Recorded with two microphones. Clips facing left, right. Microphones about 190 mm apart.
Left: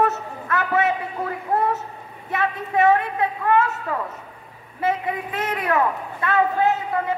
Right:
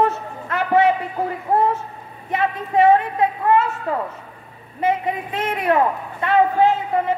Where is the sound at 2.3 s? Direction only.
30° right (ahead or behind).